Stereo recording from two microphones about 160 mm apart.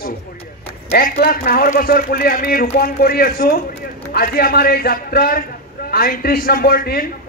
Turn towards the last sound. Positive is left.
turn(degrees=70)  # may be behind; listen again after turning